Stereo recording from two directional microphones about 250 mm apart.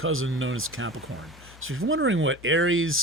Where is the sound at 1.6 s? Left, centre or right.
Right.